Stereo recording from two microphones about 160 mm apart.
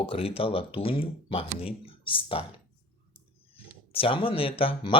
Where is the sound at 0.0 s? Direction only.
35° left (ahead or behind).